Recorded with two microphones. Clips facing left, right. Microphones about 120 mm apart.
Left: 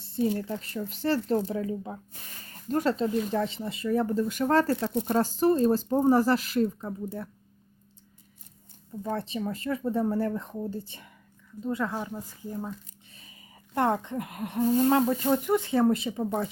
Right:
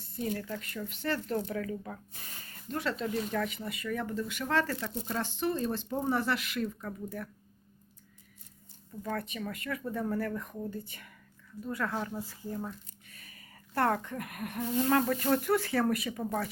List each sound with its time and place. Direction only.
0.0 s speech: 30° left (ahead or behind)
2.5 s speech: 40° left (ahead or behind)
6.8 s speech: 25° left (ahead or behind)
9.0 s speech: 30° left (ahead or behind)
14.6 s speech: 35° left (ahead or behind)
14.8 s speech: 25° left (ahead or behind)